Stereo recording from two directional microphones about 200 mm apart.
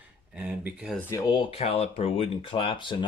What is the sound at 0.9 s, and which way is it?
Speech, 15° left (ahead or behind).